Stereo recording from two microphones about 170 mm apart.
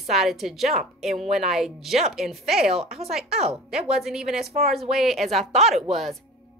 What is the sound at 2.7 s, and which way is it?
Speech, 35° right (ahead or behind).